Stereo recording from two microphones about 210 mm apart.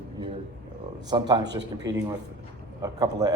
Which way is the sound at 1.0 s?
20° right (ahead or behind).